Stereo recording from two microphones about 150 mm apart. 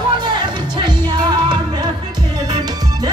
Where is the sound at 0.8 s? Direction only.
30° right (ahead or behind).